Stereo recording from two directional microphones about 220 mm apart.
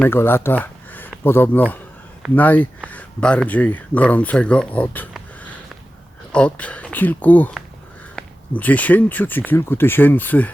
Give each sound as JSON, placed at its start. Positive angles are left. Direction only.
{"t": 0.0, "sound": "speech", "side_deg": 10}